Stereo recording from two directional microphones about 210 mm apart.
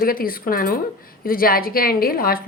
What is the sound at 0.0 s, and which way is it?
A woman's voice, 45° left (ahead or behind).